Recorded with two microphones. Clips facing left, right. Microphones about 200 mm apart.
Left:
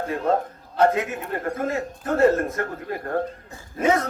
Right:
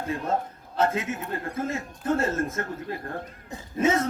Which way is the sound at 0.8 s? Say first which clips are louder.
Left 5 dB; 25° right (ahead or behind).